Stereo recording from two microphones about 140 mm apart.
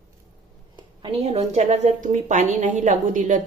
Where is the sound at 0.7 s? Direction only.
35° right (ahead or behind).